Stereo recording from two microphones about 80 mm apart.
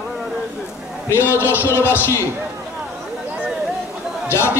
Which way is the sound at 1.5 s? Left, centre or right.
Left.